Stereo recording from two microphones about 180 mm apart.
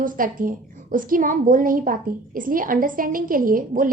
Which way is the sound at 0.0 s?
50° right (ahead or behind).